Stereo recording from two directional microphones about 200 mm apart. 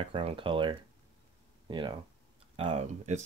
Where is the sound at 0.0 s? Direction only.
30° right (ahead or behind).